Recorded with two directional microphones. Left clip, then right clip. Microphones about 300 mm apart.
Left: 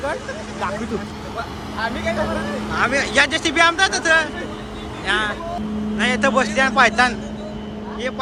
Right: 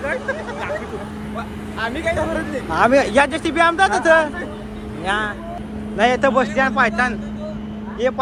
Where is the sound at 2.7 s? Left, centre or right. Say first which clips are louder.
Right 4 dB; centre.